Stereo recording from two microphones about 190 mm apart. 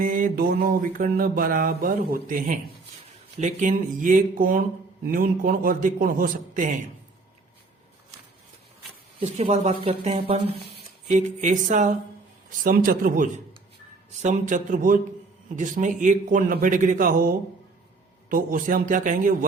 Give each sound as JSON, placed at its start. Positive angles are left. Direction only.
{"t": 0.0, "sound": "mantra", "side_deg": -45}
{"t": 9.2, "sound": "speech", "side_deg": -35}
{"t": 12.6, "sound": "mantra", "side_deg": -50}
{"t": 14.1, "sound": "speech", "side_deg": -40}
{"t": 15.5, "sound": "mantra", "side_deg": -40}